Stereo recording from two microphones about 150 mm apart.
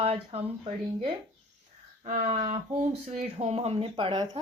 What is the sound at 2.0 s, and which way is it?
Speech, 50° right (ahead or behind).